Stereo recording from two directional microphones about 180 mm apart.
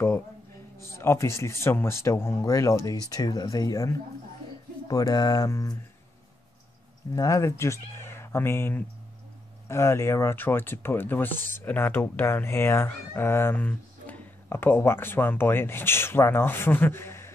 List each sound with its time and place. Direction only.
0.7 s speech: 15° left (ahead or behind)
7.2 s speech: 20° left (ahead or behind)